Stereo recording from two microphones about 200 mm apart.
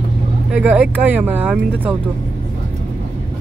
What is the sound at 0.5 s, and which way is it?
Speech, 5° right (ahead or behind).